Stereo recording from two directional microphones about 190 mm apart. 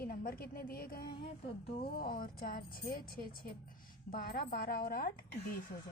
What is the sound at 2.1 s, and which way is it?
Speech, 50° left (ahead or behind).